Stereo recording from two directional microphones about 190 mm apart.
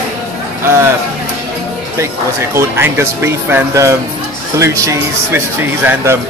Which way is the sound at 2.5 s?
15° right (ahead or behind).